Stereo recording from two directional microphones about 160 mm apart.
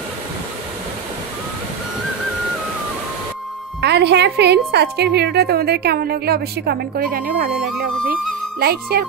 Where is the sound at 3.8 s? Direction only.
90° right; by 7.5 s 65° right (ahead or behind).